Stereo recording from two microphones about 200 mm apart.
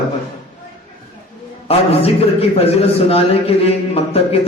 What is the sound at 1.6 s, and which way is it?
A man's voice, 30° left (ahead or behind).